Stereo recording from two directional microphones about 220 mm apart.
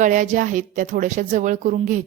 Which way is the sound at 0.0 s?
35° right (ahead or behind).